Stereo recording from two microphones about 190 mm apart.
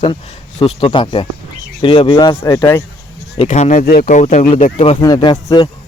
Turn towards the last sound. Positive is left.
turn(degrees=20)  # may be behind; listen again after turning